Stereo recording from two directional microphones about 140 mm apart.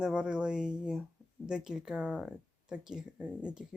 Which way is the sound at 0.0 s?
5° right (ahead or behind).